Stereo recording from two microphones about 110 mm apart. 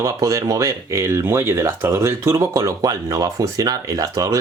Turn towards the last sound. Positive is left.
turn(degrees=-30)  # may be behind; listen again after turning